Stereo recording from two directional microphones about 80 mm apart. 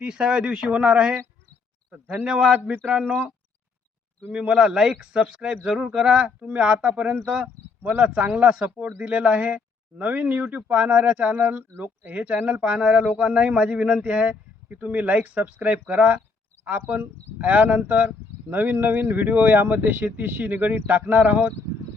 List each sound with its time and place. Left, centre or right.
0.0 s speech: centre
2.2 s speech: centre
4.4 s speech: centre
7.4 s a sound: right
8.0 s speech: centre